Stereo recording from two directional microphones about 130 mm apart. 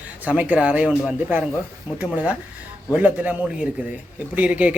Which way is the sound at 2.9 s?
10° right (ahead or behind).